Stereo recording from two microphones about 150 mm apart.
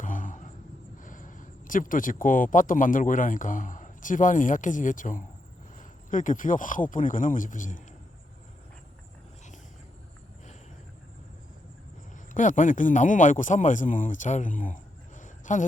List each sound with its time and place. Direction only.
0.0 s a sound: 60° left (ahead or behind)
1.0 s speech: 60° left (ahead or behind)
12.3 s a man's voice: 60° left (ahead or behind)